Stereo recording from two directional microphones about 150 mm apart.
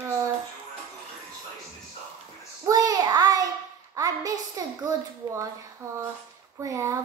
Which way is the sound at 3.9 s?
25° right (ahead or behind).